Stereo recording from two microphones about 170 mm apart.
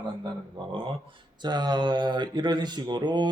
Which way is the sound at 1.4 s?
25° right (ahead or behind).